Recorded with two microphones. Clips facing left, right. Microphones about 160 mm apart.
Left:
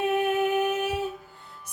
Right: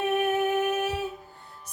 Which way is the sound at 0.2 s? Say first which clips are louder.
Left 1 dB; 15° left (ahead or behind).